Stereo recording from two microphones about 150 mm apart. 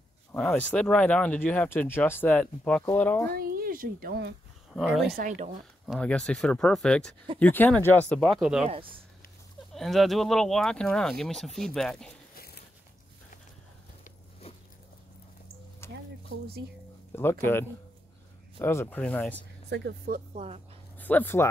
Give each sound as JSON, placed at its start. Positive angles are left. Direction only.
{"t": 0.3, "sound": "speech", "side_deg": 10}
{"t": 3.3, "sound": "speech", "side_deg": -75}
{"t": 4.7, "sound": "speech", "side_deg": -5}
{"t": 9.8, "sound": "speech", "side_deg": 0}
{"t": 12.4, "sound": "biting", "side_deg": 90}
{"t": 15.8, "sound": "a sound", "side_deg": 15}
{"t": 17.1, "sound": "speech", "side_deg": 15}
{"t": 20.3, "sound": "speech", "side_deg": -40}
{"t": 21.0, "sound": "speech", "side_deg": 10}